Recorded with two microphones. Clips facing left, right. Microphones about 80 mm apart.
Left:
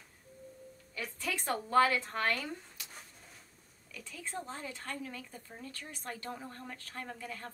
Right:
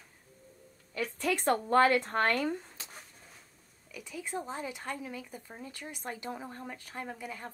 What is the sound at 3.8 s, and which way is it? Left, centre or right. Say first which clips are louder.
Speech: right 4 dB; centre.